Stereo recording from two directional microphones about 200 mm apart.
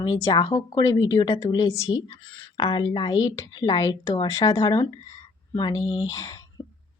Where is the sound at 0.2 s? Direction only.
20° left (ahead or behind).